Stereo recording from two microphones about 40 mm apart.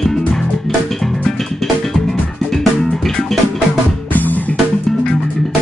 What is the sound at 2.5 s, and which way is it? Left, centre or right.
Music, centre.